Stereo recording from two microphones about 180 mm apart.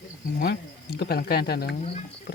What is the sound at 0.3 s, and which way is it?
Speech, 60° left (ahead or behind).